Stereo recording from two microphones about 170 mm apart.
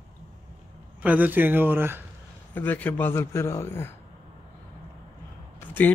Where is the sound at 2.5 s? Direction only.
10° left (ahead or behind).